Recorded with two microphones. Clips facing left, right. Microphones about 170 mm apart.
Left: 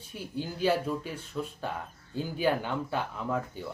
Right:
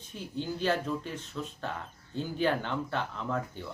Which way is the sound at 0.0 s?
10° left (ahead or behind).